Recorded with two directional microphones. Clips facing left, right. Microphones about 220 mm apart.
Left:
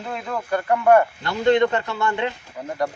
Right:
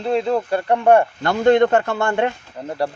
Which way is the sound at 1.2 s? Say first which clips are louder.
Right 4 dB; 50° right (ahead or behind).